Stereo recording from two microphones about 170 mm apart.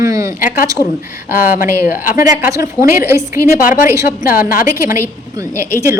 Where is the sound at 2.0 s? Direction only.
55° left (ahead or behind).